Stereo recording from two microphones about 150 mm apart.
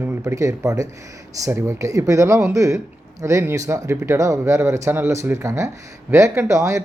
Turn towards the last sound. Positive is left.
turn(degrees=-20)  # may be behind; listen again after turning